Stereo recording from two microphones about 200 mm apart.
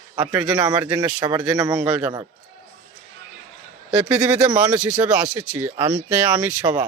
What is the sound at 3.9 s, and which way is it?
Speech, 5° right (ahead or behind).